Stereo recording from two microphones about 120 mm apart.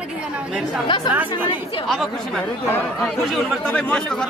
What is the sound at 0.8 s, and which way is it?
Speech, 40° left (ahead or behind).